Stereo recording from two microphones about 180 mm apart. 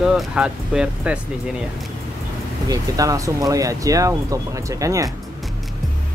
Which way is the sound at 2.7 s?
20° right (ahead or behind).